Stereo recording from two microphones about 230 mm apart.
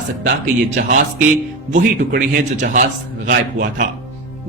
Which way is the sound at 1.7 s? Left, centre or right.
Right.